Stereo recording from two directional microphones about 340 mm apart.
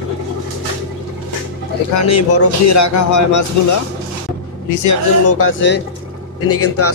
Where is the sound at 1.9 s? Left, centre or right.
Left.